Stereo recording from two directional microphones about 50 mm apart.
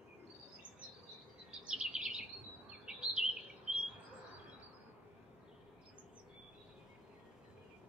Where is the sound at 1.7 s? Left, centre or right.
Centre.